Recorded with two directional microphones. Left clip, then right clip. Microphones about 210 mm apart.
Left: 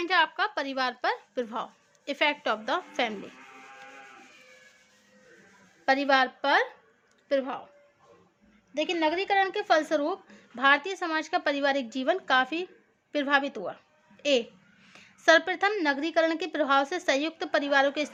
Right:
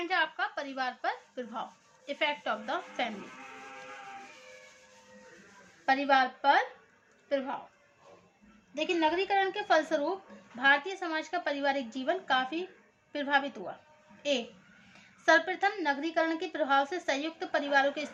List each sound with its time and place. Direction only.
0.1 s a woman's voice: 55° left (ahead or behind)
5.8 s a woman's voice: 55° left (ahead or behind)
8.7 s a woman's voice: 55° left (ahead or behind)